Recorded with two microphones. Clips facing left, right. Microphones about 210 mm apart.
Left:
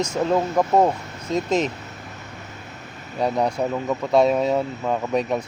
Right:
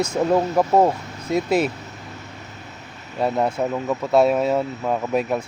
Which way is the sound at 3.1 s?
5° right (ahead or behind).